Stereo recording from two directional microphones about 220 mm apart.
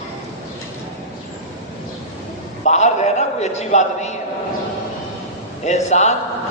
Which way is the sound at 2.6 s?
30° left (ahead or behind).